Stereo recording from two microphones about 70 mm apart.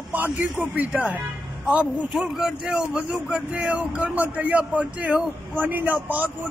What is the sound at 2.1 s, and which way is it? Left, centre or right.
A man's voice, centre.